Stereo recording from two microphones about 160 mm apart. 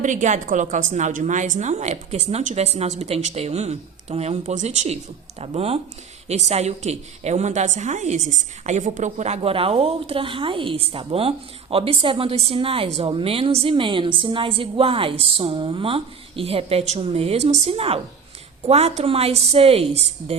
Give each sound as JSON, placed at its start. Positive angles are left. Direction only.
{"t": 0.0, "sound": "a woman's voice", "side_deg": -50}